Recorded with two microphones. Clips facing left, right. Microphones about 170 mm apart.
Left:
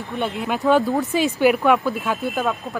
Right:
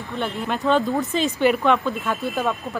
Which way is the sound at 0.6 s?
15° left (ahead or behind).